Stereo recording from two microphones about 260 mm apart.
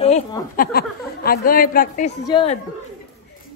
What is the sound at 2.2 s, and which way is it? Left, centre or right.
Speech, left.